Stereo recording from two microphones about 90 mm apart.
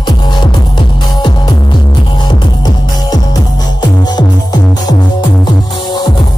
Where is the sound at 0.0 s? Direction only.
55° left (ahead or behind).